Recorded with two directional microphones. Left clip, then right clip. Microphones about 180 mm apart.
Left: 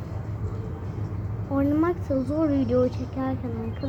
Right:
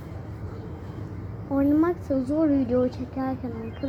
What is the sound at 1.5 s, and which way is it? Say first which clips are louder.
A woman's voice: right 1 dB; 45° right (ahead or behind).